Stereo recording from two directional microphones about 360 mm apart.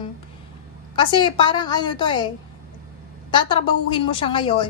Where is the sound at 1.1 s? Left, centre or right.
Centre.